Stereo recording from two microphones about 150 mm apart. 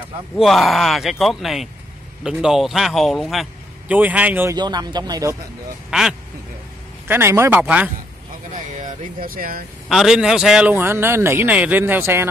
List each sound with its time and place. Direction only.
0.4 s a man's voice: centre (ahead or behind)
4.6 s speech: 30° right (ahead or behind)
5.9 s speech: 5° right (ahead or behind)
7.1 s a man's voice: 15° right (ahead or behind)
8.7 s speech: 65° right (ahead or behind)
9.8 s a man's voice: centre (ahead or behind)